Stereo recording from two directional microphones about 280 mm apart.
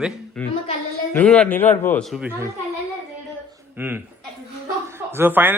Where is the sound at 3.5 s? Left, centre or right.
Centre.